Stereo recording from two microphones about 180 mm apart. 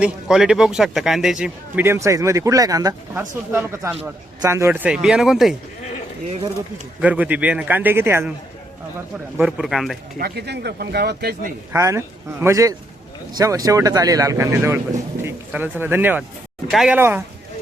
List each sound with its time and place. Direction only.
0.0 s a man's voice: 5° right (ahead or behind)
7.0 s a man's voice: 10° right (ahead or behind)
9.4 s speech: 5° right (ahead or behind)
10.2 s speech: 60° right (ahead or behind)
11.7 s a man's voice: 15° right (ahead or behind)
17.0 s a man's voice: 15° right (ahead or behind)